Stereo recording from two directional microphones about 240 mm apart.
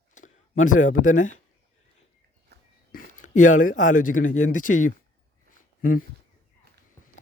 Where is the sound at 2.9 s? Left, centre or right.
Left.